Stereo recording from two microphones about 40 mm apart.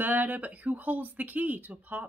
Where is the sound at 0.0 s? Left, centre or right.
Right.